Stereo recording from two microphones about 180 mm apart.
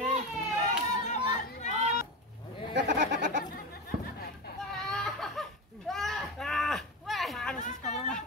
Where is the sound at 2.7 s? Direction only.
75° right (ahead or behind).